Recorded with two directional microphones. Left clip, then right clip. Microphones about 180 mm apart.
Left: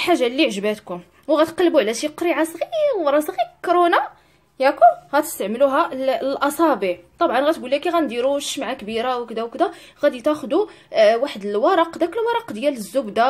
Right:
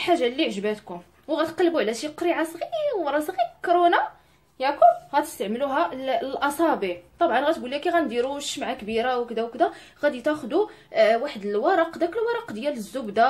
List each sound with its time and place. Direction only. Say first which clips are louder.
0.0 s a woman's voice: left 4 dB; 45° left (ahead or behind)